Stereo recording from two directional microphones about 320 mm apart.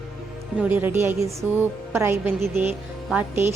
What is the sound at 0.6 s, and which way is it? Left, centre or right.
Speech, centre.